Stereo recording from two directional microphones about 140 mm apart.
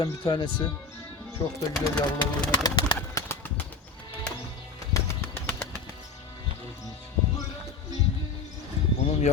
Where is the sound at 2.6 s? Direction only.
30° left (ahead or behind).